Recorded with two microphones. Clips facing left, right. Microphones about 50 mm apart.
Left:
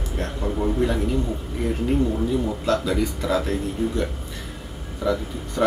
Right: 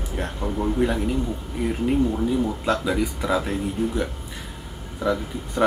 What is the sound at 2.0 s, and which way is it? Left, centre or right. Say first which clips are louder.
Speech: right 1 dB; centre.